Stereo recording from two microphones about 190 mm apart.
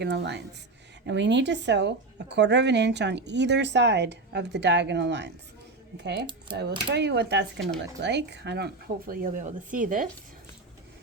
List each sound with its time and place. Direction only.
0.0 s speech: 65° right (ahead or behind); by 10.1 s 45° right (ahead or behind)